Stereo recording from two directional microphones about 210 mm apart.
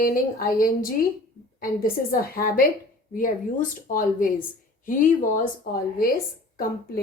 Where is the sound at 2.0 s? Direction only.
45° left (ahead or behind).